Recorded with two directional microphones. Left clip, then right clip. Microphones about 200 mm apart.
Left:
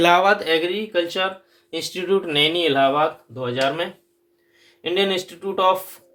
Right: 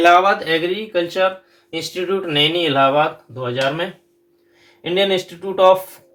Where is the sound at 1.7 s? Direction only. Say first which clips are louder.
Even; 40° left (ahead or behind).